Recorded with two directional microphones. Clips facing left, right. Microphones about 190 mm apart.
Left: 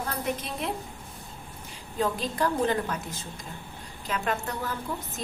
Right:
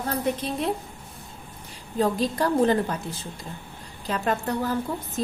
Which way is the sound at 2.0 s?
35° right (ahead or behind).